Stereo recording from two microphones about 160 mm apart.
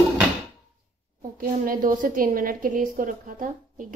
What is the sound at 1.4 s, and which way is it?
A woman's voice, 60° right (ahead or behind).